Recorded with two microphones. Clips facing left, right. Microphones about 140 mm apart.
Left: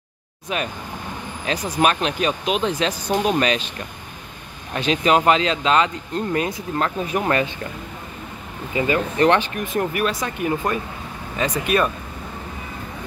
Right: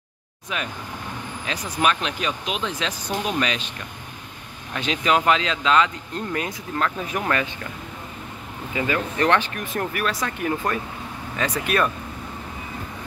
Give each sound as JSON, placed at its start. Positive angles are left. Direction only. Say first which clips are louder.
{"t": 0.5, "sound": "speech", "louder": "left 4 dB", "side_deg": 40}
{"t": 4.7, "sound": "speech", "louder": "left 4 dB", "side_deg": 35}
{"t": 8.7, "sound": "speech", "louder": "left 4 dB", "side_deg": 20}